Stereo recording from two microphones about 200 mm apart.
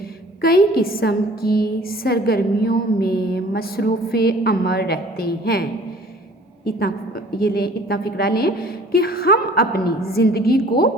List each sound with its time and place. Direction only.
0.4 s a woman's voice: 50° left (ahead or behind)
6.7 s a woman's voice: 50° left (ahead or behind)